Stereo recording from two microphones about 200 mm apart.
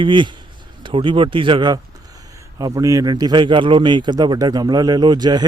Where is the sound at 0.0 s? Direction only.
25° right (ahead or behind).